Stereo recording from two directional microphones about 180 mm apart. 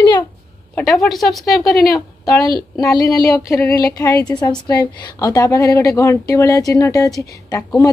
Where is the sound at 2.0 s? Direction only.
20° left (ahead or behind).